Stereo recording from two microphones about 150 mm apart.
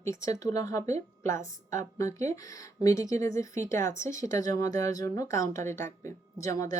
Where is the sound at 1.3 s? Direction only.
60° right (ahead or behind).